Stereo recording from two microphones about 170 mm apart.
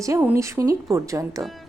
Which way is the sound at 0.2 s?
15° right (ahead or behind).